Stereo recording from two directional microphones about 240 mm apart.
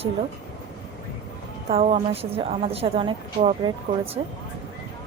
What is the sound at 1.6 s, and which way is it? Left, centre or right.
A woman's voice, right.